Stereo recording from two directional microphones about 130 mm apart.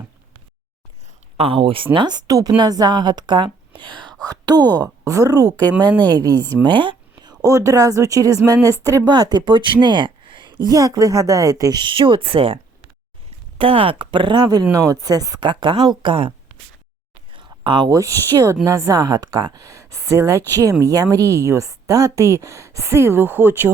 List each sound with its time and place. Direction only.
1.4 s a woman's voice: 45° right (ahead or behind)
10.7 s speech: 25° right (ahead or behind); by 12.5 s 45° right (ahead or behind)
13.6 s speech: 45° right (ahead or behind)
17.3 s speech: 40° right (ahead or behind)
19.6 s speech: 25° right (ahead or behind)